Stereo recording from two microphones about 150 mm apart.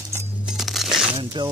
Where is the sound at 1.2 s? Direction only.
30° right (ahead or behind).